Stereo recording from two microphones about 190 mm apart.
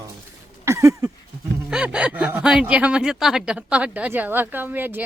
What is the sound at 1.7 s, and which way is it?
Speech, 5° right (ahead or behind).